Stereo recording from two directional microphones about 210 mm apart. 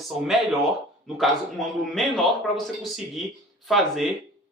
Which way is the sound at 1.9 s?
Centre (ahead or behind).